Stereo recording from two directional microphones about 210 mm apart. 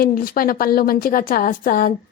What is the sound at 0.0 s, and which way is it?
A woman's voice, 45° left (ahead or behind).